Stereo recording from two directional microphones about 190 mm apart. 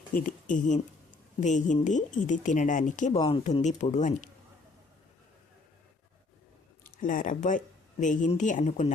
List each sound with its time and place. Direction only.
0.1 s speech: 45° left (ahead or behind)
3.2 s speech: 25° left (ahead or behind)
3.6 s speech: 40° left (ahead or behind)
6.8 s speech: 45° left (ahead or behind)